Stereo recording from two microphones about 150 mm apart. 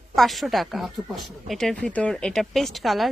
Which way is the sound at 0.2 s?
Centre (ahead or behind).